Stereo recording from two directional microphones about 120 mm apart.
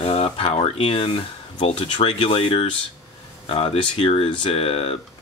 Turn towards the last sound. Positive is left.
turn(degrees=55)  # may be behind; listen again after turning